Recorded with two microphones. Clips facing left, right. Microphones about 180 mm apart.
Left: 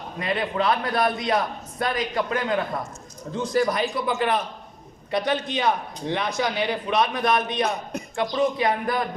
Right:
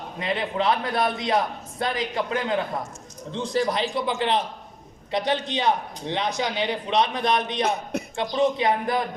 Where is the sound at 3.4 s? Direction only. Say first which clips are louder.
Left 2 dB; 25° right (ahead or behind).